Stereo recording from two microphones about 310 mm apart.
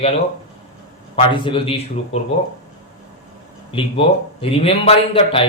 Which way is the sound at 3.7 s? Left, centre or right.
Centre.